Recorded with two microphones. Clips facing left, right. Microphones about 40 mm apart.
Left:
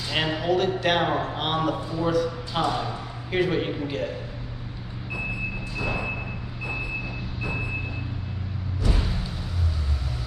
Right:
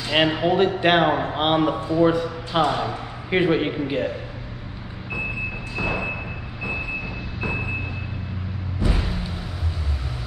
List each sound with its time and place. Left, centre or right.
0.0 s a man's voice: right
5.8 s music: right
8.8 s vehicle: right